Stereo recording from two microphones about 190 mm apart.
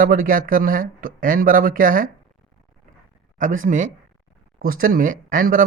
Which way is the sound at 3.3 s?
45° right (ahead or behind).